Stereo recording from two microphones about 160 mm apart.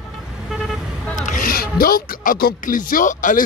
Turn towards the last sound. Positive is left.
turn(degrees=55)  # may be behind; listen again after turning